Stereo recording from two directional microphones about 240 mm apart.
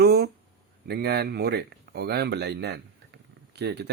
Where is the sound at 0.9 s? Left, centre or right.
Right.